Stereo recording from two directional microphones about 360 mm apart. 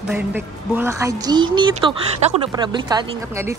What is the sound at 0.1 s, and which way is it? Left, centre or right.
Speech, centre.